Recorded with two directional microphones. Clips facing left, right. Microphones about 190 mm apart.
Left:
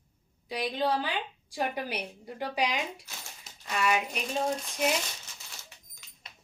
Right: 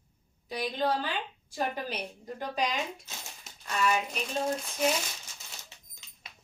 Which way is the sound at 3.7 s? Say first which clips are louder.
Even; 15° left (ahead or behind).